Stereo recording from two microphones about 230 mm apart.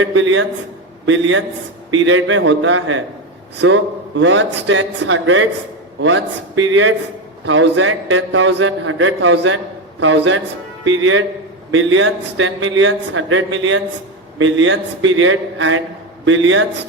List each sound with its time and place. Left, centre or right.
0.0 s a man's voice: right